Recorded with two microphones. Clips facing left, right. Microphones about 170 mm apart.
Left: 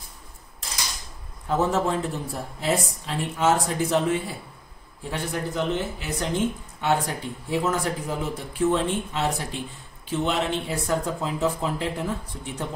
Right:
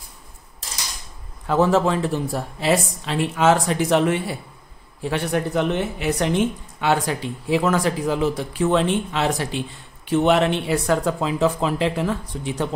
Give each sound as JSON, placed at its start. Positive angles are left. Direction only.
{"t": 1.5, "sound": "speech", "side_deg": -90}